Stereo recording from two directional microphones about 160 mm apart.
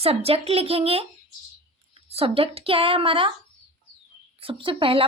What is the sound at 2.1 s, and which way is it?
Speech, 35° right (ahead or behind).